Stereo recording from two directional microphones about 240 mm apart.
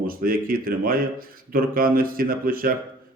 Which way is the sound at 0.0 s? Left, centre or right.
Right.